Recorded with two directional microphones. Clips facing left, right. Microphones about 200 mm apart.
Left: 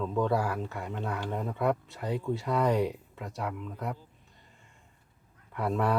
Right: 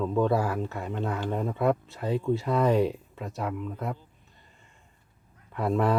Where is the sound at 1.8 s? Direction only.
15° left (ahead or behind).